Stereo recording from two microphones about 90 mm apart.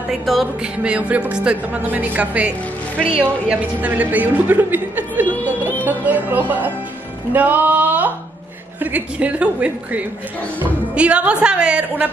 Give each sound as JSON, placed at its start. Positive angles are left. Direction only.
{"t": 0.1, "sound": "music", "side_deg": 0}
{"t": 0.8, "sound": "a woman's voice", "side_deg": -15}